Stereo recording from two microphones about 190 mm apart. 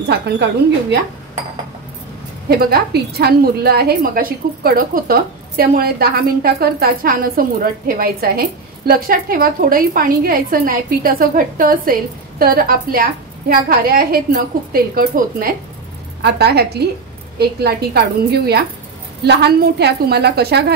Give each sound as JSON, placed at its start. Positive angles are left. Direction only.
{"t": 0.1, "sound": "a woman's voice", "side_deg": -65}
{"t": 2.6, "sound": "a woman's voice", "side_deg": -55}
{"t": 16.2, "sound": "a woman's voice", "side_deg": -60}